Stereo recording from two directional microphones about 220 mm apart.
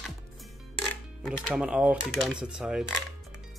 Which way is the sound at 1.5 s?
5° right (ahead or behind).